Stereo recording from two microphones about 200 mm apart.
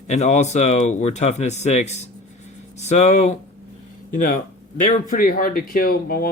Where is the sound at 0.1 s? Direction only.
35° left (ahead or behind).